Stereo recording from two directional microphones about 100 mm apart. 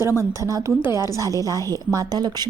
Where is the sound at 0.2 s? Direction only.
30° right (ahead or behind).